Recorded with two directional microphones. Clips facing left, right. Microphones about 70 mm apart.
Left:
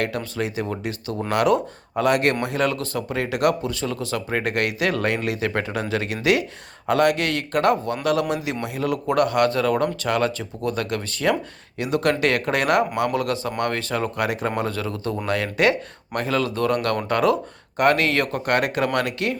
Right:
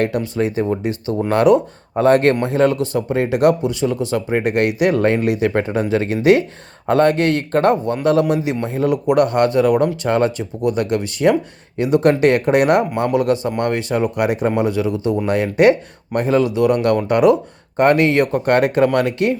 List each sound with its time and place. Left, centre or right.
0.3 s speech: right